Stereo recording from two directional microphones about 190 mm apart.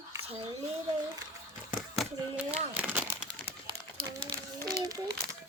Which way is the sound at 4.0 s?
25° right (ahead or behind).